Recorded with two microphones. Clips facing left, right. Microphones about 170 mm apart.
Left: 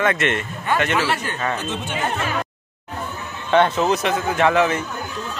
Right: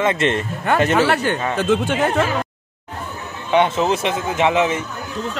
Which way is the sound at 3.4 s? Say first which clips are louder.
Even; 15° right (ahead or behind).